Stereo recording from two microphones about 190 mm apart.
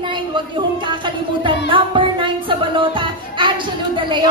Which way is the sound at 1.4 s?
25° right (ahead or behind).